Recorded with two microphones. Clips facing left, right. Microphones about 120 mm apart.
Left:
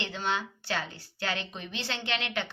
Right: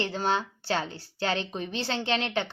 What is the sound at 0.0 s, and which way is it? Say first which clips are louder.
A woman's voice: right 5 dB; 35° right (ahead or behind).